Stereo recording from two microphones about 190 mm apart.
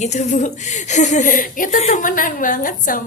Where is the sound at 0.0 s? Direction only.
40° left (ahead or behind).